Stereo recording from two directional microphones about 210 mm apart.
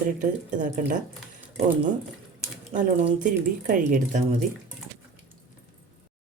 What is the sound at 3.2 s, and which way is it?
Speech, 40° right (ahead or behind).